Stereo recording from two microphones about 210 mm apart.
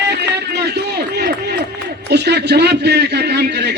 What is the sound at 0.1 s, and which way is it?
Run, 55° right (ahead or behind).